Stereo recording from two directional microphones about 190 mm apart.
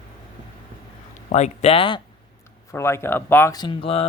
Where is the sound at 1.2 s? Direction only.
35° left (ahead or behind).